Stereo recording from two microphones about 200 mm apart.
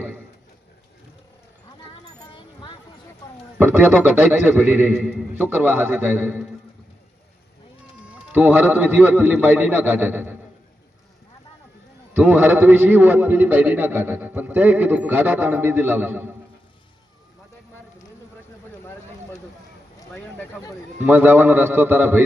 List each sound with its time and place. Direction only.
2.1 s a sound: 25° left (ahead or behind)
3.6 s a man's voice: 10° right (ahead or behind)
8.3 s a man's voice: 10° right (ahead or behind)
12.1 s a man's voice: 10° right (ahead or behind)
20.1 s a sound: 10° left (ahead or behind)
21.0 s a man's voice: 10° right (ahead or behind)